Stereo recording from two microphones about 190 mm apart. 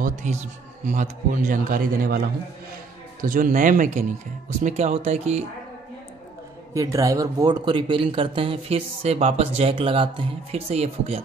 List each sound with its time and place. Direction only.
0.0 s a man's voice: 40° right (ahead or behind)
6.7 s a man's voice: 15° right (ahead or behind); by 11.2 s 35° right (ahead or behind)